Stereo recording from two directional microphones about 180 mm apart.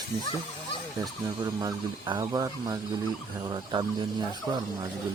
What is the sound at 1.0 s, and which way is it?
Speech, 20° right (ahead or behind).